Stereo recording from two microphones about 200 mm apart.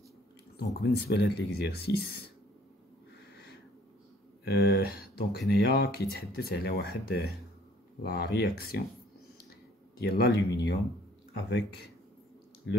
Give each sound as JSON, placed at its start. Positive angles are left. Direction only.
{"t": 0.6, "sound": "speech", "side_deg": 55}
{"t": 4.5, "sound": "speech", "side_deg": 55}
{"t": 9.9, "sound": "speech", "side_deg": 55}
{"t": 12.7, "sound": "speech", "side_deg": 70}